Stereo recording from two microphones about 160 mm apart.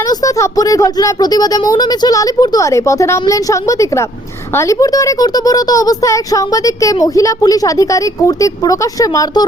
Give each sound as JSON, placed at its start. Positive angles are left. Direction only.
{"t": 0.1, "sound": "speech", "side_deg": 20}